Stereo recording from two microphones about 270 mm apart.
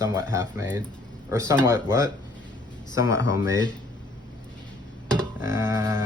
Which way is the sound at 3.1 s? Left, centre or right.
Centre.